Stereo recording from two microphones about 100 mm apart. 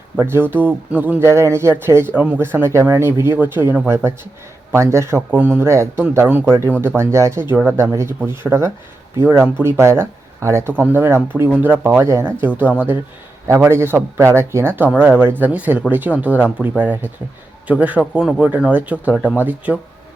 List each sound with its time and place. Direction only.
0.2 s speech: 20° right (ahead or behind)
13.7 s speech: 25° right (ahead or behind)